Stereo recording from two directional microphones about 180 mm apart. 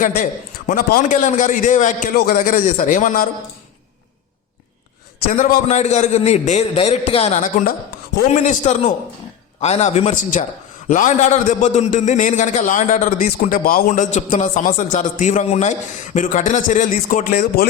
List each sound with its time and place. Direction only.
0.9 s a man's voice: 50° left (ahead or behind)
5.3 s a man's voice: 50° left (ahead or behind)